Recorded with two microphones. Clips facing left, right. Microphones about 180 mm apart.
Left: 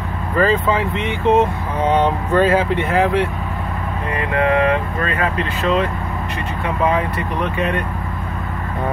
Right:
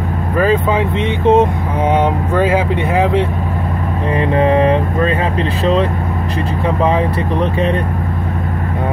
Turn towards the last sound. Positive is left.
turn(degrees=-30)  # may be behind; listen again after turning